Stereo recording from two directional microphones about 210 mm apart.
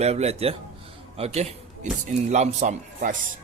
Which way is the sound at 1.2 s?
30° right (ahead or behind).